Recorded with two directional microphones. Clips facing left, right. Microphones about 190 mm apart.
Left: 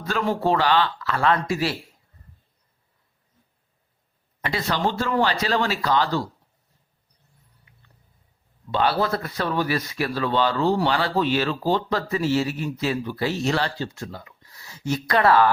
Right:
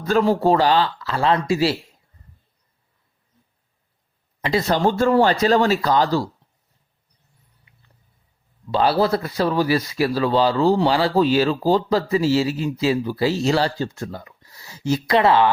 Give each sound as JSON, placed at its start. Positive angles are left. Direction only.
{"t": 0.0, "sound": "a man's voice", "side_deg": -40}
{"t": 4.4, "sound": "a man's voice", "side_deg": -40}
{"t": 8.7, "sound": "a man's voice", "side_deg": -35}
{"t": 14.5, "sound": "speech", "side_deg": -30}